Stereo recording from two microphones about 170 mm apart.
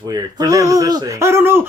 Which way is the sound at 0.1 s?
20° right (ahead or behind).